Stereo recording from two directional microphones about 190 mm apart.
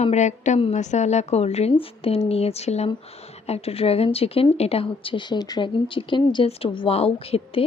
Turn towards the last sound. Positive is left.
turn(degrees=30)  # may be behind; listen again after turning